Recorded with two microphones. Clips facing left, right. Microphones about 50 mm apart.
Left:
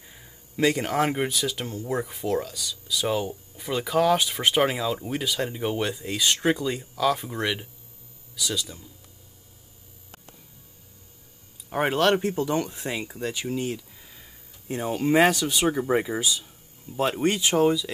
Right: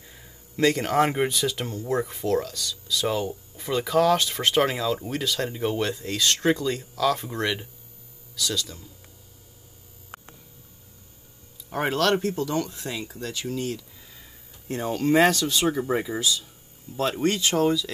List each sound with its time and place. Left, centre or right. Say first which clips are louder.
0.0 s speech: right 1 dB; centre
11.7 s speech: left 1 dB; centre
14.1 s speech: right 1 dB; centre